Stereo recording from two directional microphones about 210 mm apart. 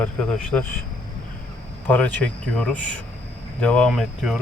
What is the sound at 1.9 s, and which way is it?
Speech, 5° left (ahead or behind).